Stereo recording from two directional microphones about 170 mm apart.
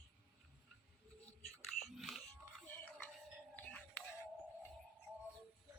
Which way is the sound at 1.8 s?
Centre (ahead or behind).